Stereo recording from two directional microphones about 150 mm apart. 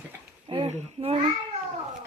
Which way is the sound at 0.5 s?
45° right (ahead or behind).